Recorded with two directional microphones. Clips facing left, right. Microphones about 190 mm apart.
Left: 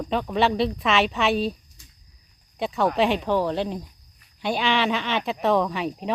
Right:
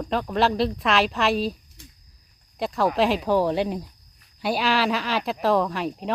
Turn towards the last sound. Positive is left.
turn(degrees=0)  # may be behind; listen again after turning